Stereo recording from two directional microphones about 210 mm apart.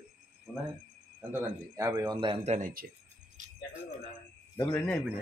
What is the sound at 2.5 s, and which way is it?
Speech, 40° right (ahead or behind).